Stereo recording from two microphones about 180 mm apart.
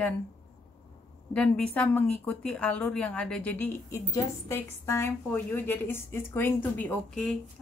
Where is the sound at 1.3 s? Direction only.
5° left (ahead or behind).